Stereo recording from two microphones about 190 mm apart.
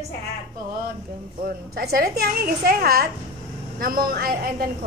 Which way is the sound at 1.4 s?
50° right (ahead or behind).